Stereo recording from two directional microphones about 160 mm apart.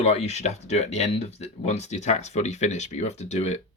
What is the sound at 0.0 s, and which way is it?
Speech, 40° left (ahead or behind).